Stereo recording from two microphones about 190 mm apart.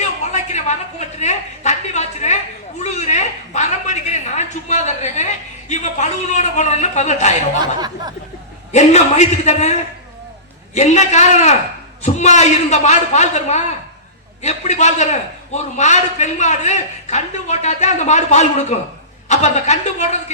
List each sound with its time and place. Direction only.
0.0 s a sound: 35° left (ahead or behind)
8.7 s a man's voice: 35° left (ahead or behind)
10.8 s a man's voice: 35° left (ahead or behind)